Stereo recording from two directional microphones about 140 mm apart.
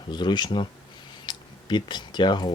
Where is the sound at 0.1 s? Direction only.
30° left (ahead or behind).